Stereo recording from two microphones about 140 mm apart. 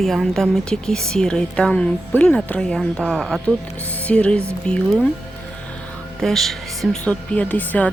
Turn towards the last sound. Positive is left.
turn(degrees=10)  # may be behind; listen again after turning